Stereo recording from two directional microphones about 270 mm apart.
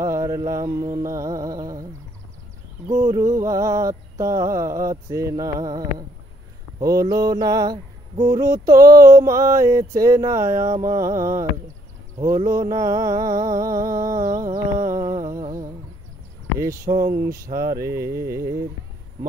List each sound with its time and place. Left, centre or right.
0.0 s mantra: centre
2.9 s mantra: centre
14.2 s a sound: right
14.8 s humming: right
15.3 s humming: centre
16.8 s speech: right
17.7 s mantra: centre